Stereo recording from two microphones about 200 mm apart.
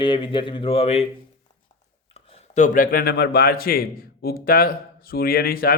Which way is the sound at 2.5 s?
40° left (ahead or behind).